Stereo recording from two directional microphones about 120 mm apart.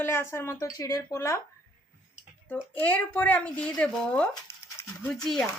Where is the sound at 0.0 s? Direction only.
20° left (ahead or behind).